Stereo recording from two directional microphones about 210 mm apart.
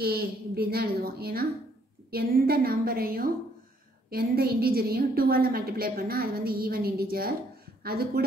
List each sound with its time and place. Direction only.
0.0 s a woman's voice: 45° right (ahead or behind)